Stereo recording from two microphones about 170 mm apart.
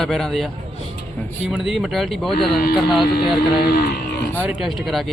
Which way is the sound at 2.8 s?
Centre (ahead or behind).